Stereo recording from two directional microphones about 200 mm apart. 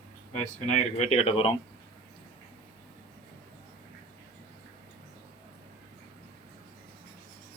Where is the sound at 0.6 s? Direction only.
35° left (ahead or behind).